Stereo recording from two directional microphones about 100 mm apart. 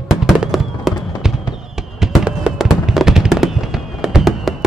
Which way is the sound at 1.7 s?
5° right (ahead or behind).